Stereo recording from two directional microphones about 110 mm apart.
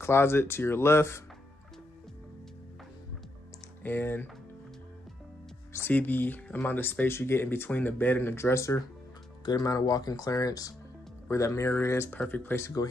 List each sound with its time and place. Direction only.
0.0 s speech: 20° left (ahead or behind)
3.8 s speech: 20° left (ahead or behind)
5.7 s speech: 20° left (ahead or behind)
9.4 s speech: 35° left (ahead or behind)